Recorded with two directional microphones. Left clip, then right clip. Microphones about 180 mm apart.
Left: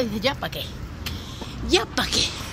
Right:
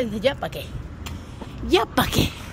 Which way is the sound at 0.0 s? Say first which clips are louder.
Right 2 dB; 20° right (ahead or behind).